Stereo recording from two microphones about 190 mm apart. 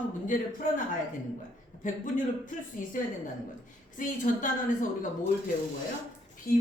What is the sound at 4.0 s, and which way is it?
Speech, 45° left (ahead or behind).